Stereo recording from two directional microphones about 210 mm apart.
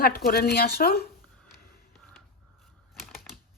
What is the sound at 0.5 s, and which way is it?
Speech, 45° left (ahead or behind).